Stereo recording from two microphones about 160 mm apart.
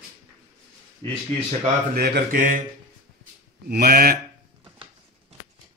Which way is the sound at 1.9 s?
80° right.